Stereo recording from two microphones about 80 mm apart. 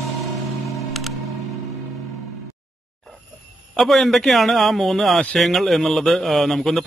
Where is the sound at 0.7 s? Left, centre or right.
Centre.